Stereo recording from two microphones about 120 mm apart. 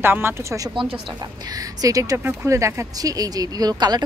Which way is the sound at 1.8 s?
30° right (ahead or behind).